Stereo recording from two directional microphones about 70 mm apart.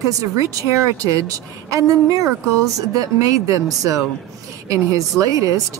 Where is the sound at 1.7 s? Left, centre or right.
Right.